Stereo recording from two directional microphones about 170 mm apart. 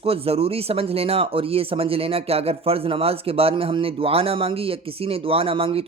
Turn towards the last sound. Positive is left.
turn(degrees=-35)  # may be behind; listen again after turning